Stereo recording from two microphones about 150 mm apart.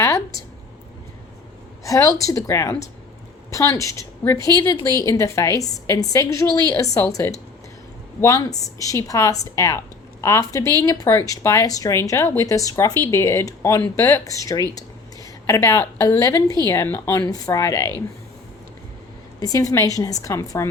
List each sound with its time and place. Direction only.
1.8 s a woman's voice: 20° left (ahead or behind)
19.4 s a woman's voice: 25° left (ahead or behind)